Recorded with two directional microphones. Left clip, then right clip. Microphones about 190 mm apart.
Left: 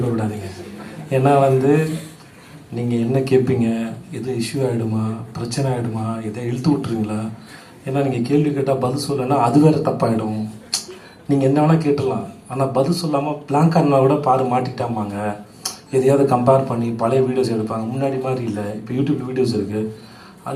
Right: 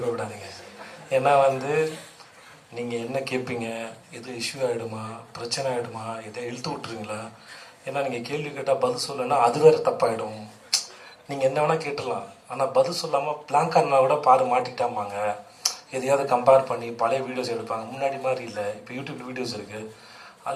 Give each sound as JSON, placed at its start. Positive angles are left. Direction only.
{"t": 1.1, "sound": "a man's voice", "side_deg": -30}
{"t": 11.3, "sound": "a man's voice", "side_deg": -30}